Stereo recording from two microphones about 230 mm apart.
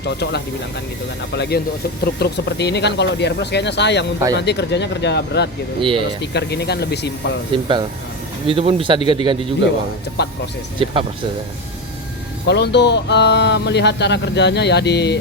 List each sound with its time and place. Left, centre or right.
0.0 s speech: left
5.8 s speech: right
6.3 s speech: left
7.5 s speech: right
10.2 s speech: left
12.5 s speech: left